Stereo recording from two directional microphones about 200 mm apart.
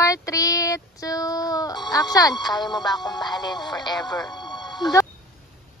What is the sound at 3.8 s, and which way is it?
Speech, 20° left (ahead or behind).